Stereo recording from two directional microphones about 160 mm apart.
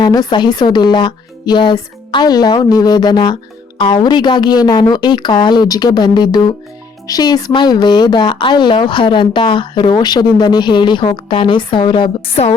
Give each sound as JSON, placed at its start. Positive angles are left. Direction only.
{"t": 0.0, "sound": "speech", "side_deg": 25}